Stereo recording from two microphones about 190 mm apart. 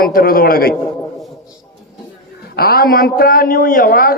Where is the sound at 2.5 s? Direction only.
50° left (ahead or behind).